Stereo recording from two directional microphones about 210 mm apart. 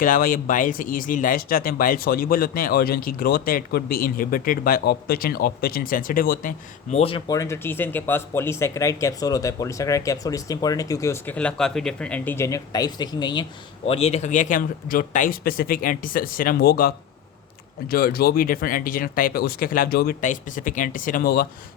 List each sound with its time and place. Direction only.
0.0 s speech: 40° left (ahead or behind)
6.9 s speech: 25° left (ahead or behind); by 21.4 s 45° left (ahead or behind)